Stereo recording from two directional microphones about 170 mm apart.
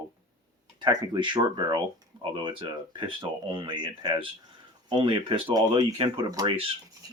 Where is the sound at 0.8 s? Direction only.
25° right (ahead or behind).